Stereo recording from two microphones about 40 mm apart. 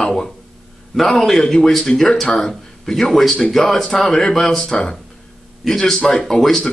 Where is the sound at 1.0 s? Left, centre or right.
Centre.